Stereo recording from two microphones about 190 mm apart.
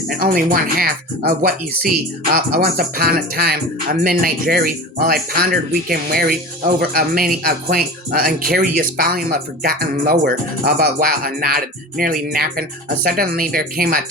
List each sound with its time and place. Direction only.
0.1 s speech: 50° right (ahead or behind)